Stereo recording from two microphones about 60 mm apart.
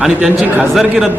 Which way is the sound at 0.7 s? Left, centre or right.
Centre.